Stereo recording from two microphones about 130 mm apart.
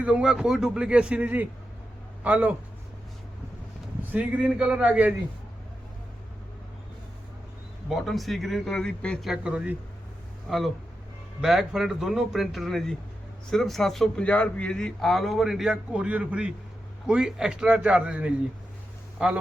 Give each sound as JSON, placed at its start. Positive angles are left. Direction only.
{"t": 0.0, "sound": "speech", "side_deg": -5}
{"t": 4.1, "sound": "speech", "side_deg": -10}
{"t": 7.9, "sound": "speech", "side_deg": 0}
{"t": 9.3, "sound": "speech", "side_deg": -5}
{"t": 11.3, "sound": "speech", "side_deg": 0}